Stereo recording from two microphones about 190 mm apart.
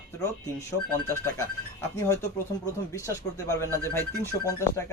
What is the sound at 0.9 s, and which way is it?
Speech, 10° left (ahead or behind).